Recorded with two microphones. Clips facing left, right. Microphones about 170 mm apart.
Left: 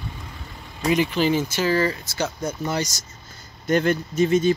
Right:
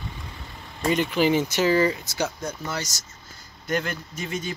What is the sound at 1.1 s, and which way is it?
Speech, 15° right (ahead or behind).